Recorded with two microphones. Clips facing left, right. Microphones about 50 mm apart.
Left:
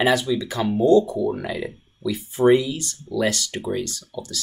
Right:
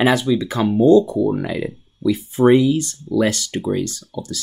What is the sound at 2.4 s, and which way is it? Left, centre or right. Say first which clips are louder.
Speech: right 4 dB; right.